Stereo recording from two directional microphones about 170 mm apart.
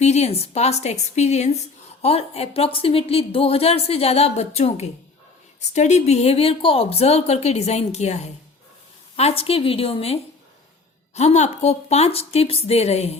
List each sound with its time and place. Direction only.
0.0 s a woman's voice: 40° left (ahead or behind)